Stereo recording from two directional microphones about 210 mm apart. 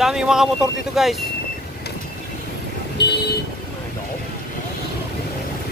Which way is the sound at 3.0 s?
50° left (ahead or behind).